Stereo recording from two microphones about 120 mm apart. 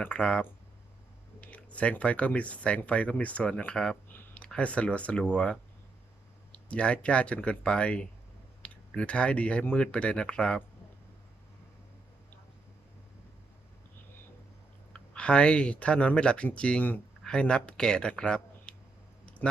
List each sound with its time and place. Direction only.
0.0 s speech: 10° left (ahead or behind)
14.9 s speech: 10° left (ahead or behind)